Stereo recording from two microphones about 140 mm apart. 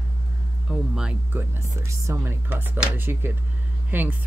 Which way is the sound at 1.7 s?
20° right (ahead or behind).